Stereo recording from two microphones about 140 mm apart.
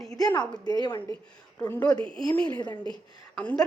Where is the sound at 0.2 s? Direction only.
30° left (ahead or behind).